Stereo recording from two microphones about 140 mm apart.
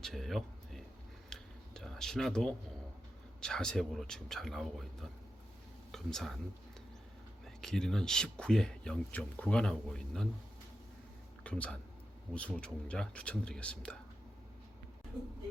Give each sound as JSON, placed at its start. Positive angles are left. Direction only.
{"t": 0.0, "sound": "speech", "side_deg": 0}
{"t": 1.3, "sound": "tick-tock", "side_deg": 5}
{"t": 3.4, "sound": "speech", "side_deg": 5}
{"t": 7.4, "sound": "speech", "side_deg": 5}
{"t": 11.4, "sound": "speech", "side_deg": 10}